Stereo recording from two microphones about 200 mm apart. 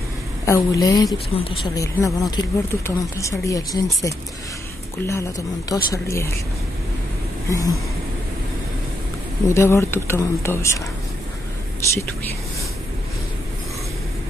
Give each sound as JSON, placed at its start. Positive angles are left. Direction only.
{"t": 0.5, "sound": "speech", "side_deg": 20}
{"t": 2.0, "sound": "speech", "side_deg": 15}
{"t": 7.4, "sound": "speech", "side_deg": 15}
{"t": 9.5, "sound": "speech", "side_deg": 15}